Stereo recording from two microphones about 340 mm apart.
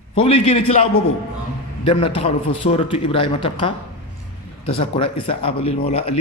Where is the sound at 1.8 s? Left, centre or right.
Centre.